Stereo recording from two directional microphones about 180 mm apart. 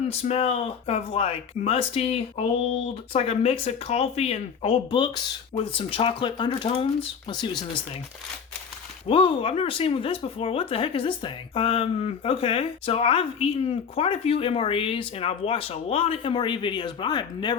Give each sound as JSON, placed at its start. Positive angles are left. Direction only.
{"t": 0.1, "sound": "speech", "side_deg": 35}
{"t": 9.0, "sound": "speech", "side_deg": 30}